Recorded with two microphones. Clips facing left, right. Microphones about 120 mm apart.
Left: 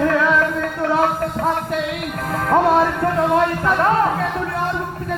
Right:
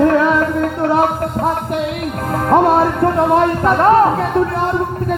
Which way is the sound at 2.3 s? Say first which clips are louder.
Right 3 dB; 20° right (ahead or behind).